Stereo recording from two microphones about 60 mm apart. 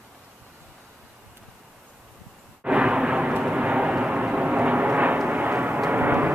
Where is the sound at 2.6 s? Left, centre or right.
Centre.